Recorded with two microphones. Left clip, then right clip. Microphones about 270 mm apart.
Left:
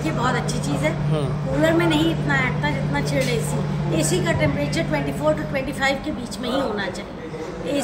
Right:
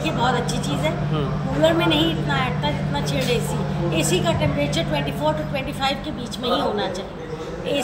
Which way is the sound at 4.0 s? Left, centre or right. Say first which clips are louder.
Right 1 dB; centre.